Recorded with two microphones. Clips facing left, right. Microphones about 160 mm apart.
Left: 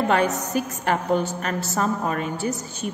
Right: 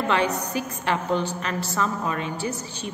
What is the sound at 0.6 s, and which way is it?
A woman's voice, 45° left (ahead or behind).